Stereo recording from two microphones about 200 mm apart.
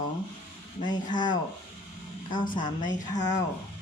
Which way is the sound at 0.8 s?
20° left (ahead or behind).